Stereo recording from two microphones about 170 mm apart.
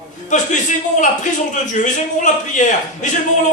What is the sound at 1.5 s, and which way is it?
A man's voice, 45° left (ahead or behind).